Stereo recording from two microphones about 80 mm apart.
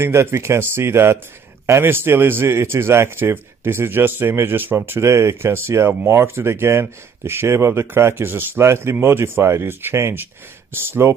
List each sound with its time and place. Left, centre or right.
0.0 s a man's voice: right